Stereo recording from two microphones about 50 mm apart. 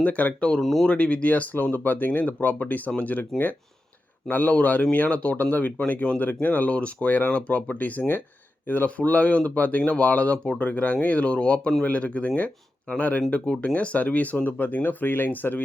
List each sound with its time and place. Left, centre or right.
0.0 s speech: left
0.6 s speech: centre
0.9 s speech: left
10.3 s speech: centre
10.6 s speech: left